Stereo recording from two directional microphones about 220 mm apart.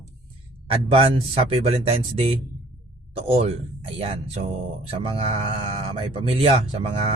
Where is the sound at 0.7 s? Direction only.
25° right (ahead or behind).